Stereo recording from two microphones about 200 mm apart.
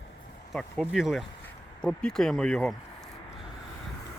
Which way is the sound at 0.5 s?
5° right (ahead or behind).